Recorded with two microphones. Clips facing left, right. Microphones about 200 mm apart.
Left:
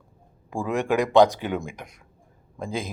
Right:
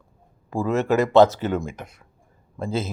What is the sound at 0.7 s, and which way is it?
Speech, 15° left (ahead or behind).